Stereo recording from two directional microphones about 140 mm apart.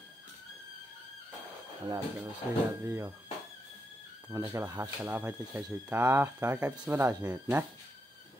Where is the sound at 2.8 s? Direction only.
20° right (ahead or behind).